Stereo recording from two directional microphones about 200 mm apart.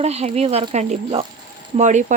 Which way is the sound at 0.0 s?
35° right (ahead or behind).